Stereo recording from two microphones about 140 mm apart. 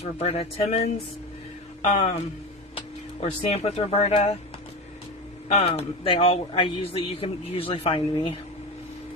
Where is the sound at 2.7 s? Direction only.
45° left (ahead or behind).